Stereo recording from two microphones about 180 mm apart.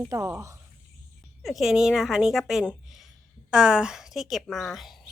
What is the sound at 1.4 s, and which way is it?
A woman's voice, centre (ahead or behind).